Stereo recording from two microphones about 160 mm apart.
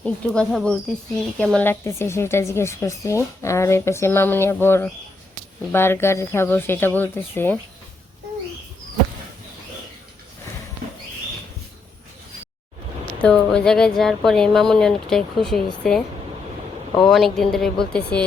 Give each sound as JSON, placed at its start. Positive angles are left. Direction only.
{"t": 0.0, "sound": "speech", "side_deg": 5}
{"t": 13.2, "sound": "speech", "side_deg": 5}
{"t": 17.1, "sound": "speech", "side_deg": 0}